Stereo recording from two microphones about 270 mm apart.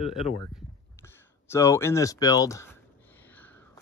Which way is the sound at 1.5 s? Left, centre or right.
Centre.